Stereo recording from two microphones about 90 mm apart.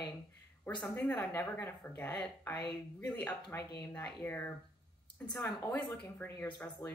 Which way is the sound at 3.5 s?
30° left (ahead or behind).